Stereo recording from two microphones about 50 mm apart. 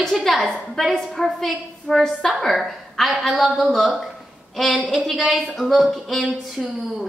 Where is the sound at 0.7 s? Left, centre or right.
Centre.